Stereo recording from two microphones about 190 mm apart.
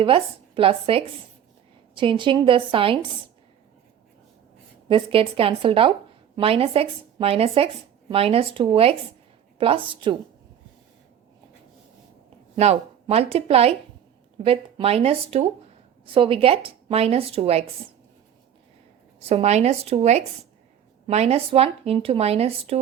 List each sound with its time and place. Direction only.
0.0 s speech: 30° right (ahead or behind)
4.9 s speech: 30° right (ahead or behind)
12.5 s speech: 35° right (ahead or behind)
19.3 s speech: 35° right (ahead or behind)